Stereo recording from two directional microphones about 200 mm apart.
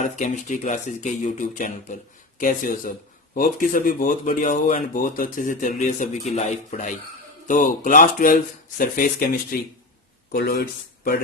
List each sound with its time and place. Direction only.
0.0 s speech: 35° left (ahead or behind)